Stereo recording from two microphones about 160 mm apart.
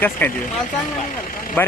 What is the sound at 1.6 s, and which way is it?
Speech, 10° left (ahead or behind).